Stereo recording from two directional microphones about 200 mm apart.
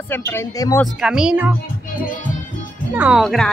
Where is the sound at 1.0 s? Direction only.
5° right (ahead or behind).